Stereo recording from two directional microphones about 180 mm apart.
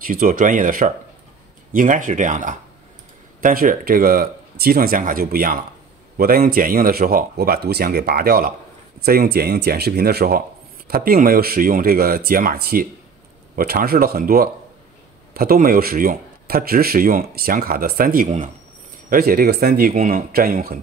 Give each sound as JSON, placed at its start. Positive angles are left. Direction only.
{"t": 0.0, "sound": "speech", "side_deg": -50}